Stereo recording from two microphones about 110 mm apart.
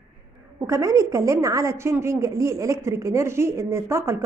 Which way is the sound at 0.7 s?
30° right (ahead or behind).